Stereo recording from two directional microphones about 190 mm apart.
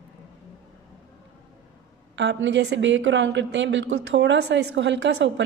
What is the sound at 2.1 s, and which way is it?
Speech, 70° right (ahead or behind).